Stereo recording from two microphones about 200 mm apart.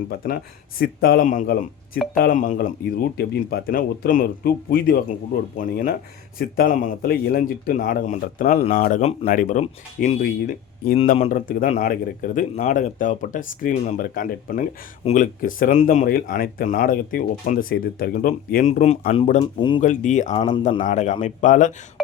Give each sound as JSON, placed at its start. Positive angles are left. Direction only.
{"t": 0.1, "sound": "speech", "side_deg": 50}
{"t": 19.8, "sound": "speech", "side_deg": 40}